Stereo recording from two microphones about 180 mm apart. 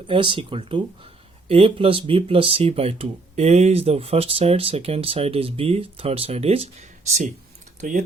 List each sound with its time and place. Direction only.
0.1 s speech: 30° right (ahead or behind)
7.8 s speech: 45° right (ahead or behind)